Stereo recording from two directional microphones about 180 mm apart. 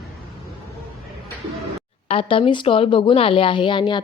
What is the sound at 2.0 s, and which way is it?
A woman's voice, 30° left (ahead or behind).